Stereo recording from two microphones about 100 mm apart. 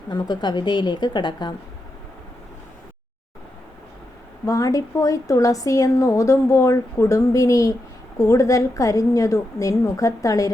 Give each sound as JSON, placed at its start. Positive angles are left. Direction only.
{"t": 0.1, "sound": "a woman's voice", "side_deg": 45}
{"t": 4.4, "sound": "a woman's voice", "side_deg": 35}